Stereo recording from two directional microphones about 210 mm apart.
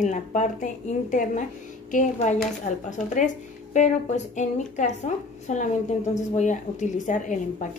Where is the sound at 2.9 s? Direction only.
35° left (ahead or behind).